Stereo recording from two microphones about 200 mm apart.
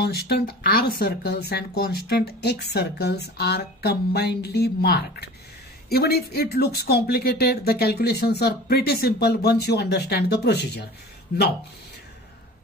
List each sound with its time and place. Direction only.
0.0 s speech: 50° left (ahead or behind)